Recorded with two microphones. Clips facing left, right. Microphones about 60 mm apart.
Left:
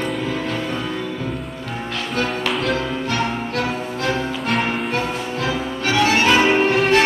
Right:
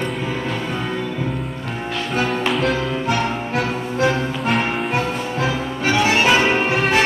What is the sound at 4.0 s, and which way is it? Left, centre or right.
Music, centre.